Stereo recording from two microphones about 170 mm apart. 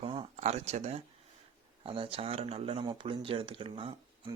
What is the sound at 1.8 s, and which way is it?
Speech, 30° right (ahead or behind).